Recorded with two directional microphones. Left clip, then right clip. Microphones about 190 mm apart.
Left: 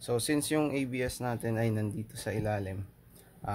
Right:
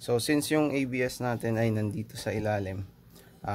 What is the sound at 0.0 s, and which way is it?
Speech, 10° right (ahead or behind).